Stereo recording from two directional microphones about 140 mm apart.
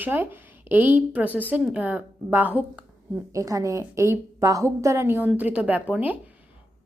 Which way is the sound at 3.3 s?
25° right (ahead or behind).